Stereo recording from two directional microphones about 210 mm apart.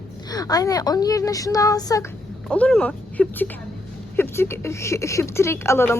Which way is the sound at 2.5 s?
5° left (ahead or behind).